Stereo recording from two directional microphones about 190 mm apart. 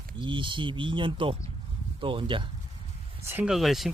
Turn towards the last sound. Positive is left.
turn(degrees=0)  # may be behind; listen again after turning